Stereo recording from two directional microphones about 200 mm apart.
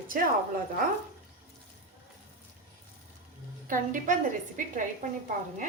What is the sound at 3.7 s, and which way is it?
A woman's voice, 40° right (ahead or behind).